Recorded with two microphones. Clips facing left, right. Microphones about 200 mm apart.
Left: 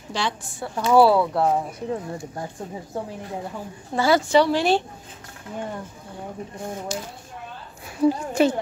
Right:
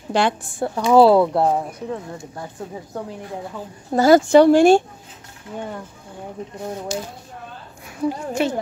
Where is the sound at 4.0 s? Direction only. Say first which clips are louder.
Right 6 dB; 45° right (ahead or behind).